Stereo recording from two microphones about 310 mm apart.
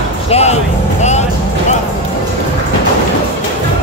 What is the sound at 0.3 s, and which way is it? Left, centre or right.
Speech, left.